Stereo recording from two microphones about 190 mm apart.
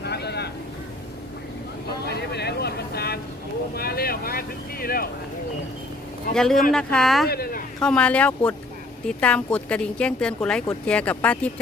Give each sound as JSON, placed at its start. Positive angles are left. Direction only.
{"t": 0.0, "sound": "boat", "side_deg": 60}
{"t": 2.0, "sound": "a sound", "side_deg": 60}
{"t": 3.8, "sound": "vehicle", "side_deg": 55}
{"t": 6.3, "sound": "a woman's voice", "side_deg": 5}
{"t": 7.3, "sound": "speech", "side_deg": 55}
{"t": 7.8, "sound": "a woman's voice", "side_deg": 5}